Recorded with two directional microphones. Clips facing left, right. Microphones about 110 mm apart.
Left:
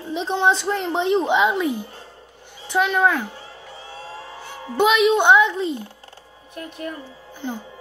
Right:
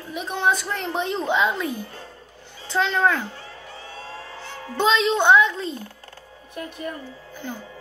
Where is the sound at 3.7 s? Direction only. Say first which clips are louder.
Left 2 dB; 25° left (ahead or behind).